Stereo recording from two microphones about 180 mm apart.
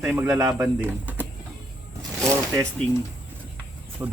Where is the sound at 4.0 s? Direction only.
15° right (ahead or behind).